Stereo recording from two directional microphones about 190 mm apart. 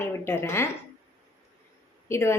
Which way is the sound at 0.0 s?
15° left (ahead or behind).